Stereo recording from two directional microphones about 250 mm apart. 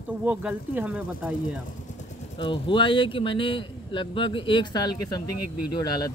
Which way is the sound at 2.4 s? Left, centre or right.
Centre.